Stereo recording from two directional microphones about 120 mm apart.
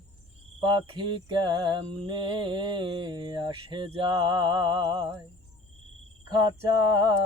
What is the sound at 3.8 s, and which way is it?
Mantra, 50° right (ahead or behind).